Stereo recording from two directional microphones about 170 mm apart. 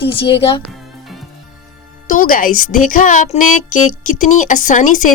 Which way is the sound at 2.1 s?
55° left (ahead or behind).